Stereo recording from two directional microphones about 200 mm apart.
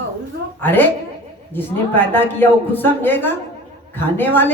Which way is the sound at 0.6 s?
10° left (ahead or behind).